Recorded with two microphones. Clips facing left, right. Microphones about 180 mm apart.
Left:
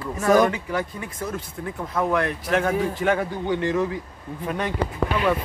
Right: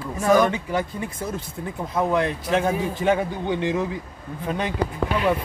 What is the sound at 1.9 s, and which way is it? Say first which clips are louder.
A man's voice: right 1 dB; 20° right (ahead or behind).